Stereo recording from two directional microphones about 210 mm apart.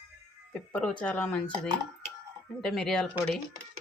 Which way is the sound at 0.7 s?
5° left (ahead or behind).